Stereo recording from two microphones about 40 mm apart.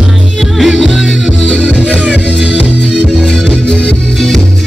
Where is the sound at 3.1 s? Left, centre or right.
Centre.